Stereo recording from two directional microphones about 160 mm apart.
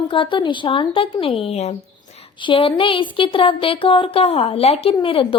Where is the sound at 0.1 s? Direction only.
30° left (ahead or behind).